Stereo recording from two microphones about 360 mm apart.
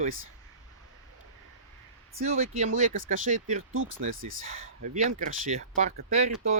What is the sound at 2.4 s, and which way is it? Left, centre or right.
Speech, right.